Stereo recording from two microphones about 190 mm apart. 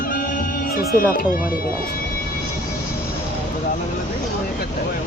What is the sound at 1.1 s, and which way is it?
Speech, 45° left (ahead or behind).